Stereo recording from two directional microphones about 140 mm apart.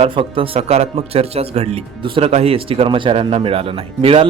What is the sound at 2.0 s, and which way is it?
Speech, 40° right (ahead or behind).